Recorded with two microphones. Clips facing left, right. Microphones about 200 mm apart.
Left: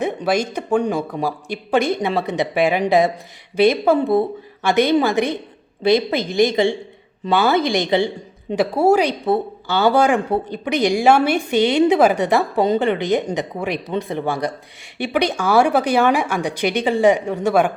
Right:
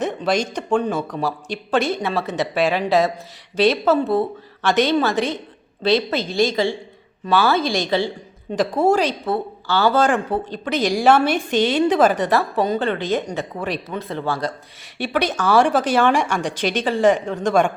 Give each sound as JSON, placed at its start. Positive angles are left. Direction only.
{"t": 0.0, "sound": "a woman's voice", "side_deg": 10}
{"t": 8.7, "sound": "speech", "side_deg": 10}